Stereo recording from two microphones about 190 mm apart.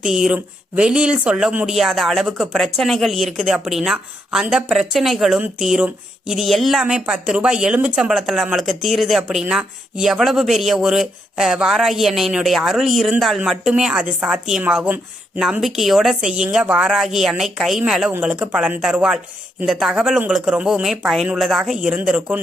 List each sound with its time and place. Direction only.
0.0 s speech: 5° right (ahead or behind)